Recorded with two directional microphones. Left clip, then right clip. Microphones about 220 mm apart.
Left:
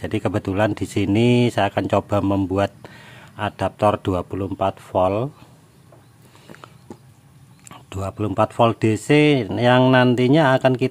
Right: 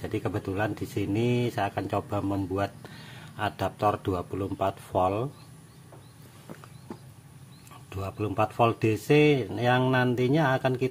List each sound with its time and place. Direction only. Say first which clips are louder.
0.0 s speech: left 8 dB; 40° left (ahead or behind)
7.7 s speech: left 7 dB; 40° left (ahead or behind)